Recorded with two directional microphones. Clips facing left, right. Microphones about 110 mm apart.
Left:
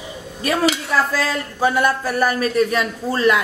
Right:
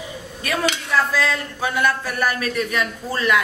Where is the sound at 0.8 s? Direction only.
35° left (ahead or behind).